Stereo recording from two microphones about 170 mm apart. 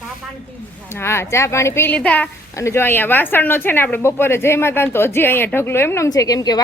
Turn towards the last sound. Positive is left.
turn(degrees=20)  # may be behind; listen again after turning